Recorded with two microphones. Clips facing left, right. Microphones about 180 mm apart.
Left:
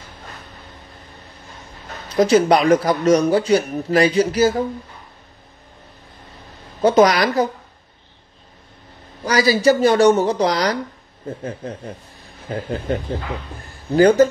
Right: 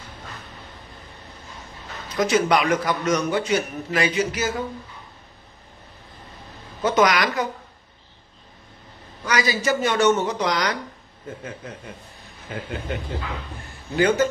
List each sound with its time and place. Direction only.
2.1 s speech: 35° left (ahead or behind)
6.8 s speech: 35° left (ahead or behind)
9.2 s speech: 35° left (ahead or behind)